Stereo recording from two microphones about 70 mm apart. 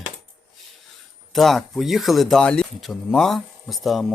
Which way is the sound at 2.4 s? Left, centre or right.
Centre.